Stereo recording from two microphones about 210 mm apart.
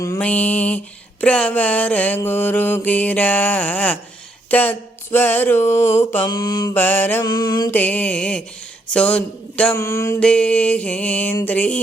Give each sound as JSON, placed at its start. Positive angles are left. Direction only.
{"t": 0.0, "sound": "mantra", "side_deg": 10}
{"t": 7.8, "sound": "mantra", "side_deg": 10}